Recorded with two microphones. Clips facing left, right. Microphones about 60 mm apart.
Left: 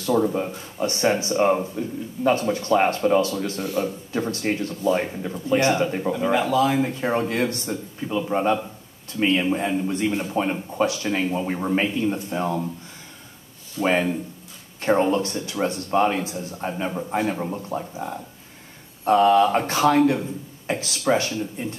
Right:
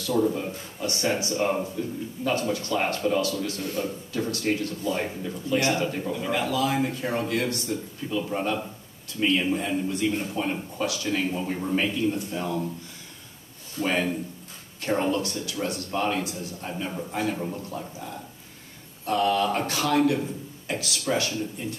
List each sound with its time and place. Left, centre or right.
0.0 s speech: left
13.7 s speech: left